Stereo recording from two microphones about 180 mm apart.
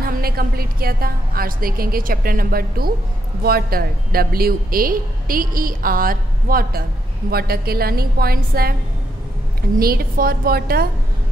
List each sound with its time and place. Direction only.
0.0 s a woman's voice: 55° right (ahead or behind)
9.8 s a woman's voice: 55° right (ahead or behind)